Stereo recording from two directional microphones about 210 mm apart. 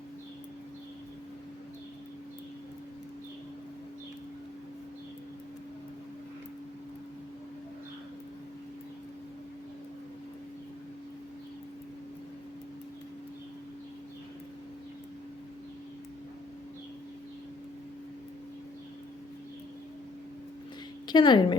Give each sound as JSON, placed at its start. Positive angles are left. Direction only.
{"t": 21.1, "sound": "a woman's voice", "side_deg": 20}